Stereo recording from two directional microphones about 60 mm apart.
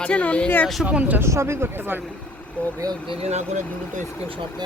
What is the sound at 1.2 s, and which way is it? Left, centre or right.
Speech, right.